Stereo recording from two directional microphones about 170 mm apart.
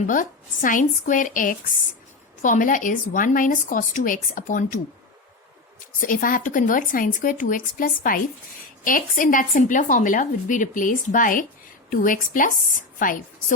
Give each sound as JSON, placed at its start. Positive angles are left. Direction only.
{"t": 0.1, "sound": "a woman's voice", "side_deg": 50}
{"t": 6.0, "sound": "a woman's voice", "side_deg": 55}